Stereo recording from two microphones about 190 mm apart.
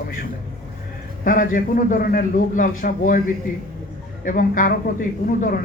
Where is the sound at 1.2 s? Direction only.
45° left (ahead or behind).